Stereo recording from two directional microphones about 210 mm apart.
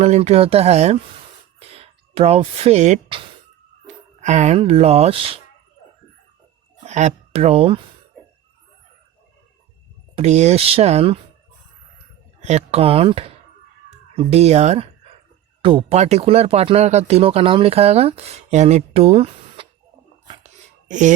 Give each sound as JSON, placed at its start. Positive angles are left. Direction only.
{"t": 0.0, "sound": "speech", "side_deg": -30}
{"t": 6.8, "sound": "speech", "side_deg": -35}
{"t": 10.2, "sound": "speech", "side_deg": -30}
{"t": 12.4, "sound": "speech", "side_deg": -35}
{"t": 13.9, "sound": "chicken", "side_deg": -30}
{"t": 15.6, "sound": "speech", "side_deg": -30}
{"t": 20.4, "sound": "a sound", "side_deg": -35}